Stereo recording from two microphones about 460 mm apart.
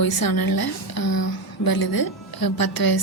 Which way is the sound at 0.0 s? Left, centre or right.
Left.